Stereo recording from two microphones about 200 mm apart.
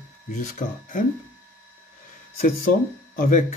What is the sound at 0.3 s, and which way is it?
Speech, 40° left (ahead or behind).